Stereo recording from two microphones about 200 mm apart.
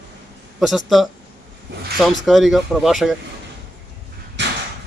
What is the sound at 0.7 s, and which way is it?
Speech, centre (ahead or behind).